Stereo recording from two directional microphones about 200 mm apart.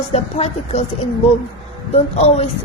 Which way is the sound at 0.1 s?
30° left (ahead or behind).